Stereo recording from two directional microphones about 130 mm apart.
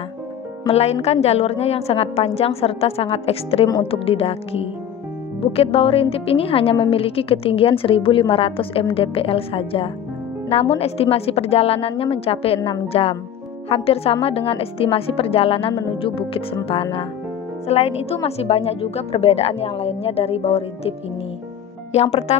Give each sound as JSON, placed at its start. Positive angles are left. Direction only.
{"t": 0.7, "sound": "speech", "side_deg": 55}
{"t": 21.9, "sound": "speech", "side_deg": 55}